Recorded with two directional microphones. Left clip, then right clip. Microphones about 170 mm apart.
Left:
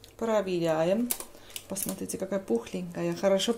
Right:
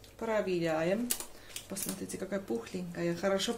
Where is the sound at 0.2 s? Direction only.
40° left (ahead or behind).